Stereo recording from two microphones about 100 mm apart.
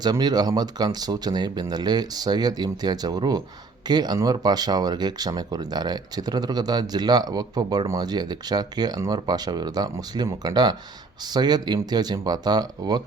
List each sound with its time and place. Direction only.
0.0 s speech: 45° right (ahead or behind)